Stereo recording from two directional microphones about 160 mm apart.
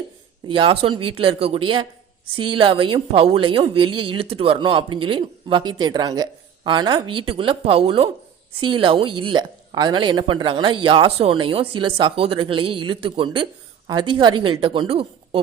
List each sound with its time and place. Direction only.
0.4 s a woman's voice: 30° right (ahead or behind)